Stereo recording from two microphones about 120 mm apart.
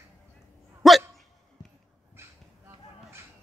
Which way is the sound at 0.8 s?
Centre (ahead or behind).